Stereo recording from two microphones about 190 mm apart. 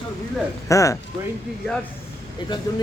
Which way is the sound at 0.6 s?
15° left (ahead or behind).